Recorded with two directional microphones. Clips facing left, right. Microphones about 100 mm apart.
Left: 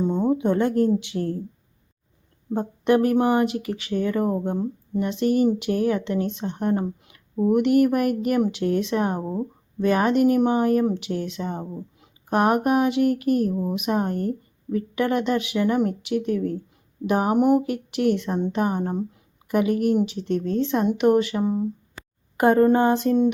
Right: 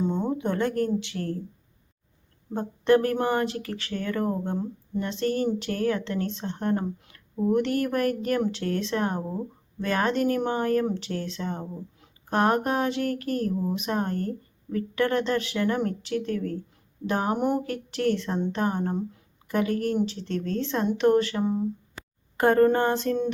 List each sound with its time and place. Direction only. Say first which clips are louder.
0.0 s a sound: left 4 dB; 5° left (ahead or behind)
0.3 s speech: left 6 dB; 15° left (ahead or behind)
2.5 s speech: left 1 dB; 15° left (ahead or behind)